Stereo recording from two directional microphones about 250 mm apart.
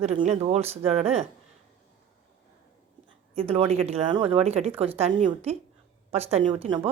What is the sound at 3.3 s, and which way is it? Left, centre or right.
Speech, right.